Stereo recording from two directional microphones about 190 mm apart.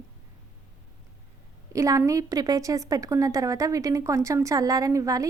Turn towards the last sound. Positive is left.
turn(degrees=-15)  # may be behind; listen again after turning